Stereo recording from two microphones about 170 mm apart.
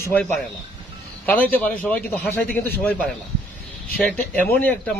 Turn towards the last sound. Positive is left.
turn(degrees=10)  # may be behind; listen again after turning